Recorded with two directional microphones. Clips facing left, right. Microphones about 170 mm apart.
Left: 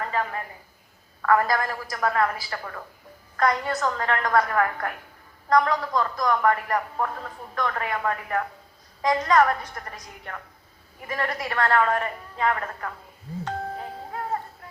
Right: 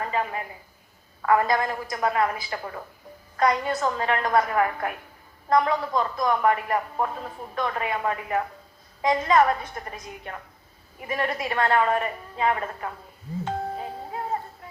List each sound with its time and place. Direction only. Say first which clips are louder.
0.1 s a man's voice: even; 20° right (ahead or behind)
13.4 s music: right 2 dB; 20° right (ahead or behind)